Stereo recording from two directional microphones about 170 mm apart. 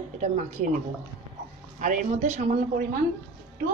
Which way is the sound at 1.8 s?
45° right (ahead or behind).